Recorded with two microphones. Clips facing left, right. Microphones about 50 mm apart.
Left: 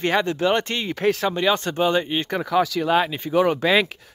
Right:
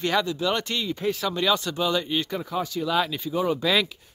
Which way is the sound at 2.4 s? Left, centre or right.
Left.